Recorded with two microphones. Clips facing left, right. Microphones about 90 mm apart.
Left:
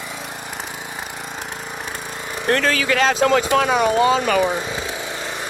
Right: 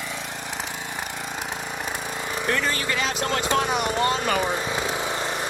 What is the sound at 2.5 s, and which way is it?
Speech, 80° left.